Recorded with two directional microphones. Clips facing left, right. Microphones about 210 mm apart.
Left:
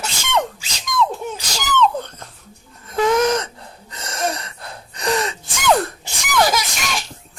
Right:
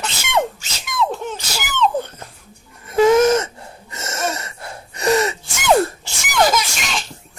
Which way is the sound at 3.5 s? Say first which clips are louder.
Right 3 dB; 10° right (ahead or behind).